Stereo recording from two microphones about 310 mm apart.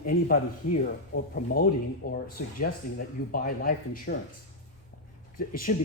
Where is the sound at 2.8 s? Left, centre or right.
Left.